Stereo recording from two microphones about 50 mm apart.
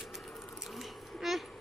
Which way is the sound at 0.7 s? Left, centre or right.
Centre.